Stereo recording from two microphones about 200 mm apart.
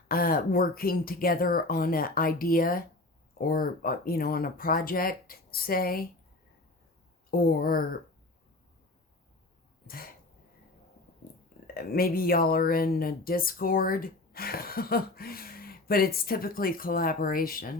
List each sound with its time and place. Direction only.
0.1 s speech: 45° left (ahead or behind)
7.3 s speech: 45° left (ahead or behind)
9.8 s a sound: 45° left (ahead or behind)
11.7 s speech: 45° left (ahead or behind)